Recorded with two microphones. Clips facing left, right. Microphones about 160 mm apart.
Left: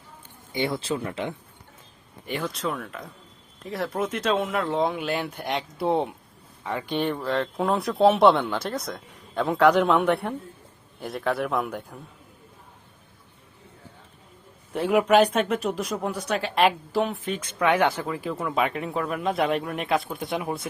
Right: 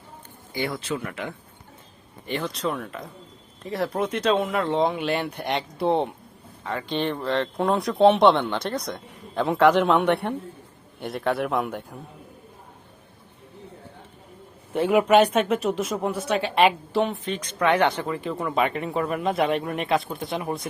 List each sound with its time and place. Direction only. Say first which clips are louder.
0.8 s speech: left 1 dB; 30° left (ahead or behind)
2.2 s speech: right 2 dB; 5° left (ahead or behind)
6.7 s speech: even; 15° left (ahead or behind); by 11.9 s centre (ahead or behind)
14.7 s speech: right 2 dB; centre (ahead or behind)